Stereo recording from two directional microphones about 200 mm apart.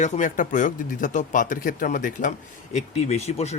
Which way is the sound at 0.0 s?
40° left (ahead or behind).